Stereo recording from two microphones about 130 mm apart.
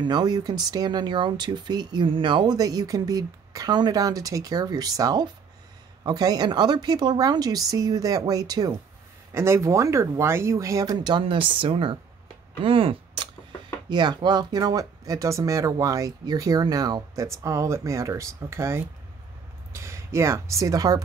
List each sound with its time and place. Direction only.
0.0 s speech: 30° right (ahead or behind)
9.3 s speech: 20° right (ahead or behind)